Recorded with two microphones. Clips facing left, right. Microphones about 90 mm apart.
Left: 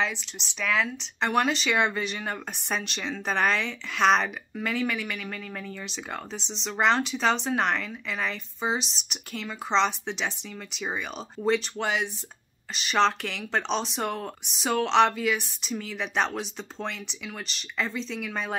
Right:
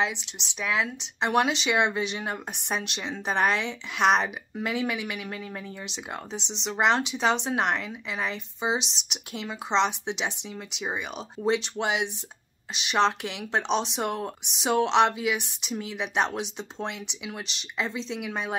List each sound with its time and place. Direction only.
0.0 s speech: 20° right (ahead or behind)